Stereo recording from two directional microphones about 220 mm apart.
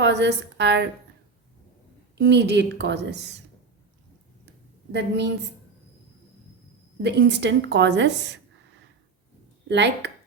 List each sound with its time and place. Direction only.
0.0 s a woman's voice: 50° right (ahead or behind)
2.1 s a woman's voice: 50° right (ahead or behind)
4.9 s a woman's voice: 50° right (ahead or behind)
7.0 s a woman's voice: 50° right (ahead or behind)
9.6 s a woman's voice: 50° right (ahead or behind)